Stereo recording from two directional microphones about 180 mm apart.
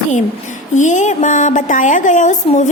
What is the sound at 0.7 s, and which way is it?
A woman's voice, 45° left (ahead or behind).